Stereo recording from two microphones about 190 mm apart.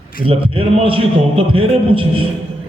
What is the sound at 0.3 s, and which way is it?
A man's voice, 30° right (ahead or behind).